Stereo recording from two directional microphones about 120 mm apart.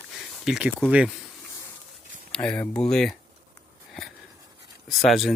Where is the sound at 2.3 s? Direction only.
5° left (ahead or behind).